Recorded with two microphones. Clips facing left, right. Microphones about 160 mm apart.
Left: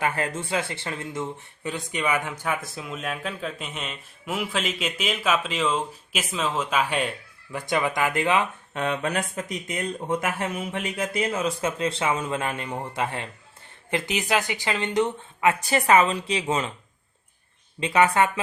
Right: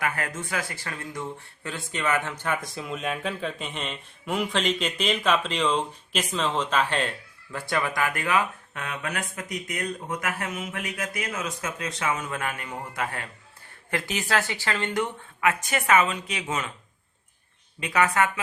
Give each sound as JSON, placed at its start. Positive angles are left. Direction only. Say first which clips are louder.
{"t": 0.0, "sound": "speech", "louder": "left 3 dB", "side_deg": 30}
{"t": 17.7, "sound": "speech", "louder": "left 3 dB", "side_deg": 25}